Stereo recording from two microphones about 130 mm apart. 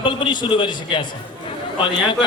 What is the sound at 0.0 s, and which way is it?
A man's voice, 40° left (ahead or behind).